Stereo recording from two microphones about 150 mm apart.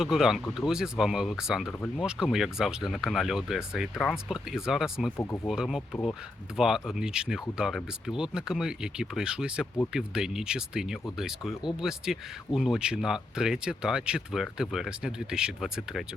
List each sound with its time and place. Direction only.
0.0 s speech: 5° right (ahead or behind)
5.1 s speech: 15° left (ahead or behind)
5.5 s speech: centre (ahead or behind)